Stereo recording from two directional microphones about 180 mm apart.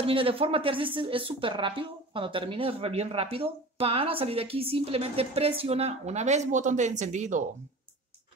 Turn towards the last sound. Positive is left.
turn(degrees=-40)  # may be behind; listen again after turning